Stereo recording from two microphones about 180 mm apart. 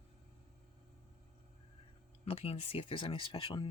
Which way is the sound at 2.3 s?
35° left (ahead or behind).